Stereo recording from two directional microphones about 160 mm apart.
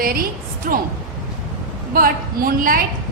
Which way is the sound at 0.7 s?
60° right (ahead or behind).